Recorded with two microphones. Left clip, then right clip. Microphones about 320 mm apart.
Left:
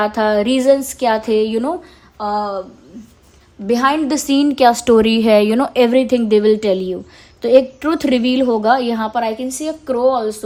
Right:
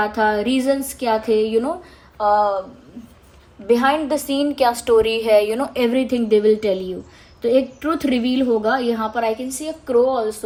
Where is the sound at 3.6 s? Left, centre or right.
Left.